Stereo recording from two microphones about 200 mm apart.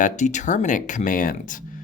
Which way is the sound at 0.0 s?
40° left (ahead or behind).